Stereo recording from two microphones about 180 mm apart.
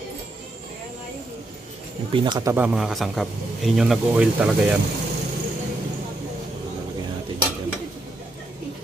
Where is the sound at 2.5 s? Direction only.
5° right (ahead or behind).